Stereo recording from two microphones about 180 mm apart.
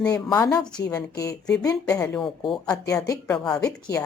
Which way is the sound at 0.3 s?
20° left (ahead or behind).